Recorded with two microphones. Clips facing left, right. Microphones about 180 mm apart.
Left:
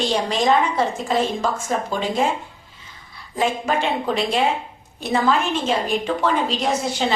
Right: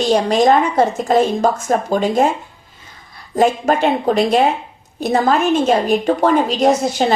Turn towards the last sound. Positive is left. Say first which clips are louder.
# right 7 dB
turn(degrees=-45)  # may be behind; listen again after turning